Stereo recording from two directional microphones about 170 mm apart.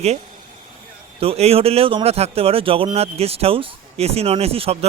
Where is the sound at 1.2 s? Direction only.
35° right (ahead or behind).